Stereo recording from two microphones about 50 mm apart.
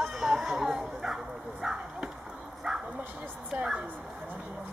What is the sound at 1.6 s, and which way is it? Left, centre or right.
Bow-wow, centre.